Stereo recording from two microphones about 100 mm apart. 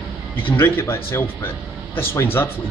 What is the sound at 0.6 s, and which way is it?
Speech, 20° left (ahead or behind).